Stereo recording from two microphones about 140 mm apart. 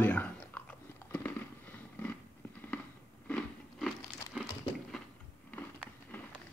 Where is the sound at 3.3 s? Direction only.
10° left (ahead or behind).